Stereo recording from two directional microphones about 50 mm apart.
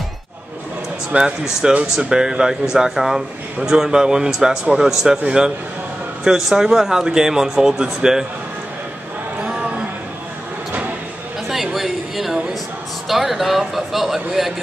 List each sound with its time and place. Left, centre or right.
1.1 s speech: right; by 5.2 s centre
6.2 s speech: centre
11.4 s a sound: centre
13.1 s speech: centre